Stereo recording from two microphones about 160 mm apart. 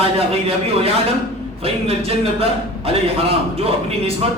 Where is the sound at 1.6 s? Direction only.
35° right (ahead or behind).